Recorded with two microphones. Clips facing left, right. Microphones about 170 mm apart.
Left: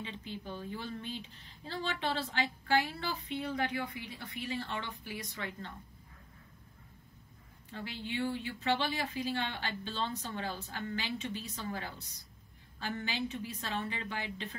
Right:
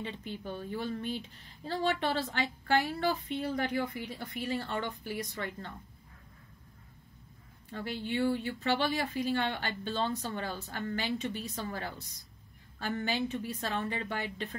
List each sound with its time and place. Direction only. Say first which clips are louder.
0.0 s speech: right 3 dB; 50° right (ahead or behind)
7.7 s speech: right 5 dB; 45° right (ahead or behind)